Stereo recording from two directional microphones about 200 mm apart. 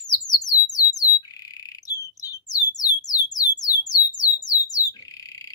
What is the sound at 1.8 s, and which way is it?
Bird, 20° left (ahead or behind).